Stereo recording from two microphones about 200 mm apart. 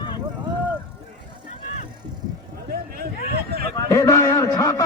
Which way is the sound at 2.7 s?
50° right (ahead or behind).